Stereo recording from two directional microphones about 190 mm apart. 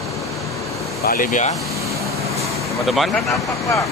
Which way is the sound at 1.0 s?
50° left (ahead or behind).